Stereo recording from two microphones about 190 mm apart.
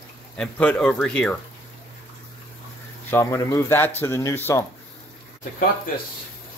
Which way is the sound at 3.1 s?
15° left (ahead or behind).